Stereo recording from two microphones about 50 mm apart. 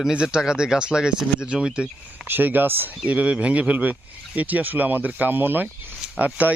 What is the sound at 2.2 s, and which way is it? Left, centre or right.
Speech, right.